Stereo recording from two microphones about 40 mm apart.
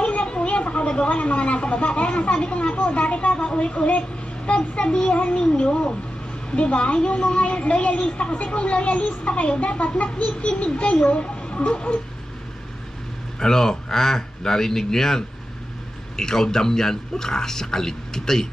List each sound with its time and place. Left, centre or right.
0.0 s a child's voice: left
13.4 s speech: centre